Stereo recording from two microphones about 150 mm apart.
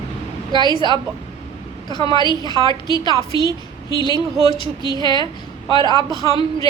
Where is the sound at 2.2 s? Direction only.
30° left (ahead or behind).